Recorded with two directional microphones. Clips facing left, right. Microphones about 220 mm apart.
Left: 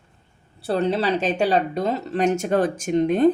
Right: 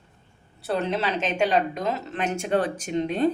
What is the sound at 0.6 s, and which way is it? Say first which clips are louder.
Speech: left 4 dB; 30° left (ahead or behind).